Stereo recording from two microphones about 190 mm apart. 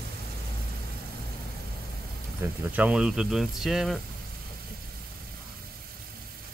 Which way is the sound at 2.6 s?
10° right (ahead or behind).